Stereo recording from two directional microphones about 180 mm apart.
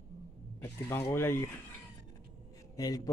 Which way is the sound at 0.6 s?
15° left (ahead or behind).